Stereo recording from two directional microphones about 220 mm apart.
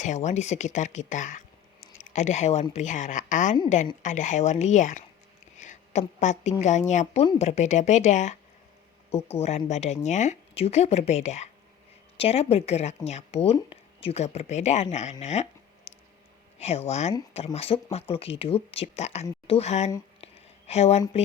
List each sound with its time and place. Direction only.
0.0 s a woman's voice: 30° left (ahead or behind)
16.6 s speech: 30° left (ahead or behind)
20.2 s a sound: 30° left (ahead or behind)
21.0 s speech: 25° left (ahead or behind)